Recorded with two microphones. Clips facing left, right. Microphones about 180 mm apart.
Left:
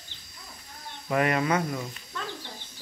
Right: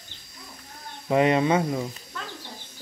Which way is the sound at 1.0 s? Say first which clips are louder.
Right 5 dB; 25° right (ahead or behind).